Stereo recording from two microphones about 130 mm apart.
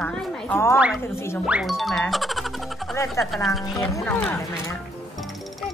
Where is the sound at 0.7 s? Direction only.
10° right (ahead or behind).